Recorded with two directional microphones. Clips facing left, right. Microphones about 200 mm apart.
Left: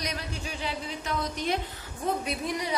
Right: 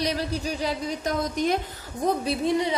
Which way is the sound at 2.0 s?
30° right (ahead or behind).